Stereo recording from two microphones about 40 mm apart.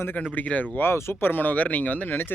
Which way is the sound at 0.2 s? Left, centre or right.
Left.